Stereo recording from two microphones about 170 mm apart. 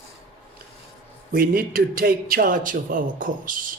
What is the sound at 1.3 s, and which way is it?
A man's voice, 60° right (ahead or behind).